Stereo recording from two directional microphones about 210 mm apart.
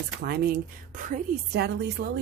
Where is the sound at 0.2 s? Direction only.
45° right (ahead or behind).